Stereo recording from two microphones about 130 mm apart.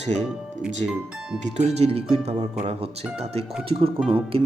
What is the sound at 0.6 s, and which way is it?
Speech, 5° right (ahead or behind).